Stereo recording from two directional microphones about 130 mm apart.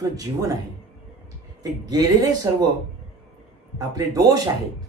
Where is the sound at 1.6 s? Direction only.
30° right (ahead or behind).